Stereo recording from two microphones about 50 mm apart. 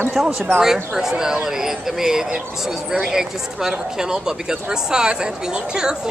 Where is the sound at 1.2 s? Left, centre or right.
Centre.